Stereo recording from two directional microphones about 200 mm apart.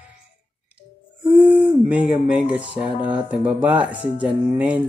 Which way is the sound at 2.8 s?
5° right (ahead or behind).